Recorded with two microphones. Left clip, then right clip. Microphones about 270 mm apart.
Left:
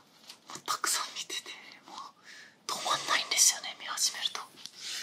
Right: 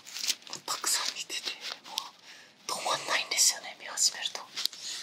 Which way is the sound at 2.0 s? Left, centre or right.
Right.